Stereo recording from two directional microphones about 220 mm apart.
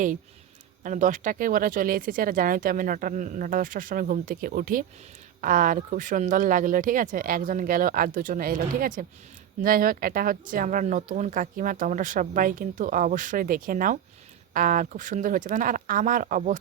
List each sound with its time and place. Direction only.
0.8 s speech: 35° right (ahead or behind)